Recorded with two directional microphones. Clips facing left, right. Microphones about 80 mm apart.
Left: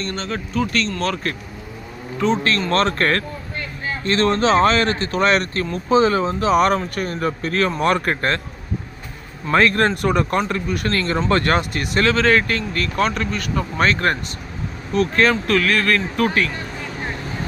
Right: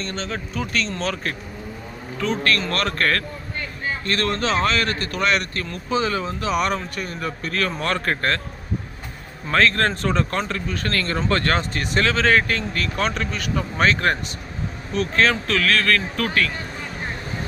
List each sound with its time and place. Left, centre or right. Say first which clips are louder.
0.0 s speech: left 3 dB; centre
2.1 s a man's voice: left 3 dB; left
7.8 s speech: left 4 dB; centre
9.5 s speech: left 3 dB; centre